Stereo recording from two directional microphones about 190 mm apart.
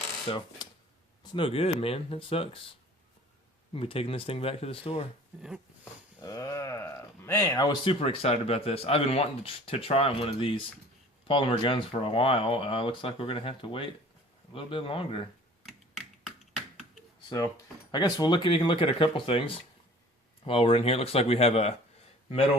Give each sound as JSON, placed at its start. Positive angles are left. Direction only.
{"t": 0.3, "sound": "speech", "side_deg": 25}
{"t": 3.7, "sound": "speech", "side_deg": 30}
{"t": 6.2, "sound": "speech", "side_deg": 20}
{"t": 15.6, "sound": "finger snapping", "side_deg": 0}
{"t": 17.9, "sound": "speech", "side_deg": 20}